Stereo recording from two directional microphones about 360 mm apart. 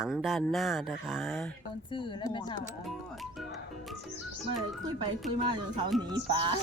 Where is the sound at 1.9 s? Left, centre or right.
Centre.